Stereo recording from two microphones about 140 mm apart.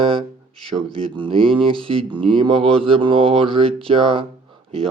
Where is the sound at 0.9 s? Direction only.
40° right (ahead or behind).